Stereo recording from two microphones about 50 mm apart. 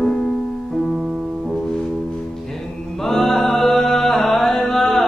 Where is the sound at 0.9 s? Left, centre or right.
Centre.